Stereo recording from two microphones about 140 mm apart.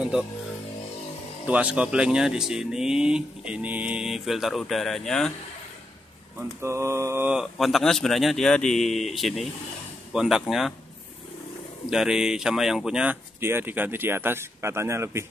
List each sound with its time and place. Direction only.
1.4 s speech: 10° right (ahead or behind)
6.6 s mantra: 20° right (ahead or behind)
7.3 s speech: centre (ahead or behind)
11.9 s speech: 5° right (ahead or behind); by 15.2 s 20° right (ahead or behind)